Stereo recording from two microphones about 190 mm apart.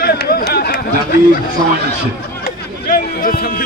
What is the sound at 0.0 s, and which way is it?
Run, 55° left (ahead or behind).